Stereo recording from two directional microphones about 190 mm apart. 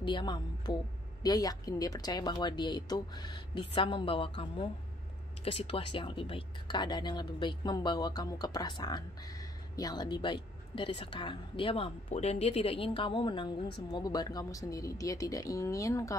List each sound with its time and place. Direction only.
0.0 s a woman's voice: 25° left (ahead or behind)